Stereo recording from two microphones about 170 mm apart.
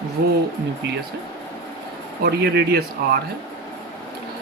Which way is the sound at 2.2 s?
70° right (ahead or behind).